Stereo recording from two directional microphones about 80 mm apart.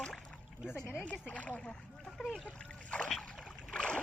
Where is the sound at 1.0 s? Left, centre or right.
Centre.